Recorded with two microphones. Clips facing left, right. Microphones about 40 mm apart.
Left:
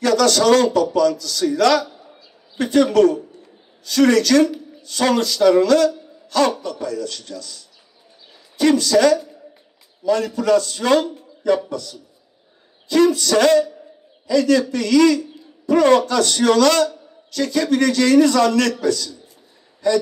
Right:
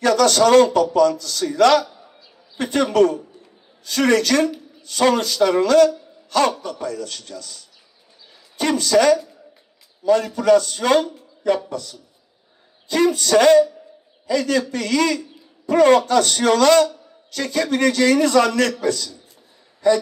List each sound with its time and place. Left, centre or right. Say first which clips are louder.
0.0 s a man's voice: even; right
12.8 s a man's voice: left 3 dB; right
14.7 s a man's voice: left 5 dB; right